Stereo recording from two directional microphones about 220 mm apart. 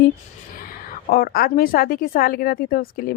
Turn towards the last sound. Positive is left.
turn(degrees=40)  # may be behind; listen again after turning